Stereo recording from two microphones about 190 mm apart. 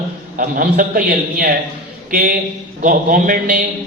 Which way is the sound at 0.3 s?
45° right (ahead or behind).